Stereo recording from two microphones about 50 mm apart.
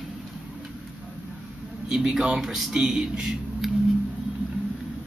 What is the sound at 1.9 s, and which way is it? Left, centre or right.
Speech, centre.